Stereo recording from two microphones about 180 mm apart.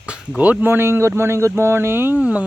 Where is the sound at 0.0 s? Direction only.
5° right (ahead or behind).